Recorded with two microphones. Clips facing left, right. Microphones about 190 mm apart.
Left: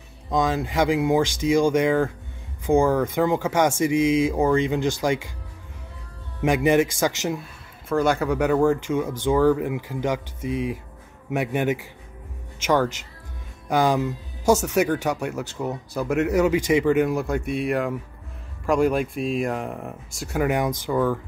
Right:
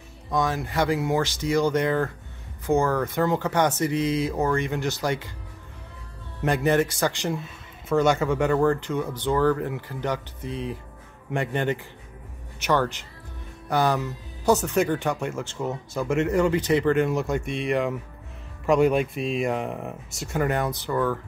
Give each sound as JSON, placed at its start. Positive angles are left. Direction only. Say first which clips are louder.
{"t": 0.3, "sound": "speech", "louder": "left 3 dB", "side_deg": 15}
{"t": 6.4, "sound": "speech", "louder": "left 3 dB", "side_deg": 15}
{"t": 13.7, "sound": "speech", "louder": "left 3 dB", "side_deg": 15}
{"t": 20.4, "sound": "speech", "louder": "left 4 dB", "side_deg": 15}